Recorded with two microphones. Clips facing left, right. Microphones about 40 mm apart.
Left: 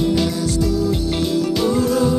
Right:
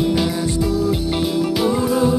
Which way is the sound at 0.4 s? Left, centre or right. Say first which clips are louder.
Even; right.